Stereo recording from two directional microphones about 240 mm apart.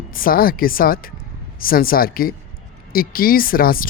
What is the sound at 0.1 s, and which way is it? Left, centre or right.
Speech, left.